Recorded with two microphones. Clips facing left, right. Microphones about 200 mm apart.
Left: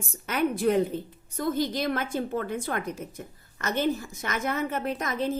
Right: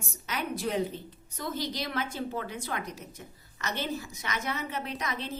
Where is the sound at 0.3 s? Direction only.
55° left (ahead or behind).